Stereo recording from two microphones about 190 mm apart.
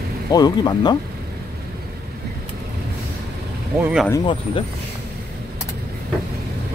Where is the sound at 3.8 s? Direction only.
5° right (ahead or behind).